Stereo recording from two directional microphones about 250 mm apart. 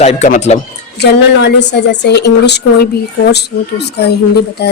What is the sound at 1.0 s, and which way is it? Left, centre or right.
A woman's voice, left.